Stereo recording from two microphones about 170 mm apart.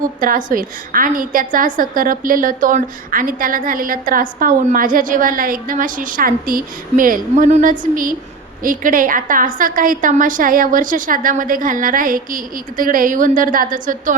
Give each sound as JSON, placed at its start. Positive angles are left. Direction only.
{"t": 0.2, "sound": "a woman's voice", "side_deg": -55}